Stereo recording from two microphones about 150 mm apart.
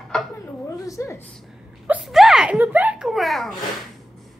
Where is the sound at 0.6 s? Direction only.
20° left (ahead or behind).